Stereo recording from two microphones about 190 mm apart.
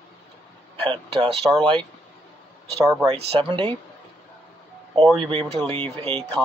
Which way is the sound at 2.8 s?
15° right (ahead or behind).